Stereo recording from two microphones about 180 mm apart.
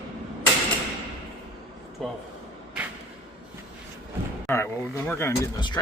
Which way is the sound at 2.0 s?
Centre (ahead or behind).